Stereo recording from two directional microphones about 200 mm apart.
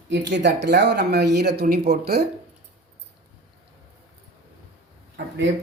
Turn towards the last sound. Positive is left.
turn(degrees=-65)  # may be behind; listen again after turning